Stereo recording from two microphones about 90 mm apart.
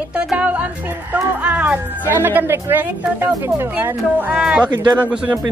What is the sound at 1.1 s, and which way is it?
Speech, 15° right (ahead or behind).